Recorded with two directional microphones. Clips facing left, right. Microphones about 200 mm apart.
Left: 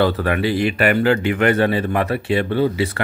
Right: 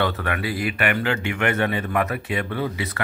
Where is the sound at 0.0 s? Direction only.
30° left (ahead or behind).